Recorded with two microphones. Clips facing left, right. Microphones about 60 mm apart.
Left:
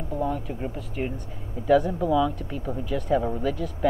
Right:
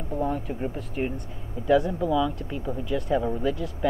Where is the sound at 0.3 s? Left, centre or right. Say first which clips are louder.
Right 1 dB; centre.